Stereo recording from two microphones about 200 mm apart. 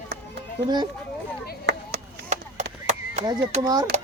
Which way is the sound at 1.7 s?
60° right (ahead or behind).